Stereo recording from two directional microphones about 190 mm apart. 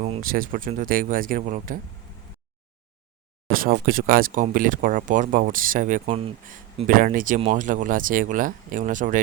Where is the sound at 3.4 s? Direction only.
50° right (ahead or behind).